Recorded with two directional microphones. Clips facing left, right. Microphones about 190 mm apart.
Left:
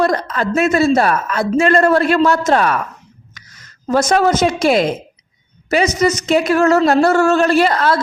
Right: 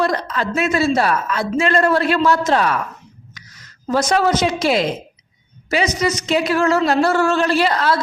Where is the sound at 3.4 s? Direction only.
50° left (ahead or behind).